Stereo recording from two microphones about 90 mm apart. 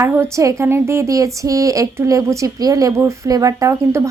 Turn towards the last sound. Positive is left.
turn(degrees=-35)  # may be behind; listen again after turning